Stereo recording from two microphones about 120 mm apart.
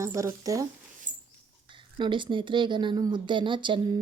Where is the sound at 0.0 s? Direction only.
25° right (ahead or behind).